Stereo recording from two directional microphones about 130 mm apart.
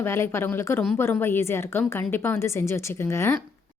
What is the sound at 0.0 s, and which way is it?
A woman's voice, 20° left (ahead or behind).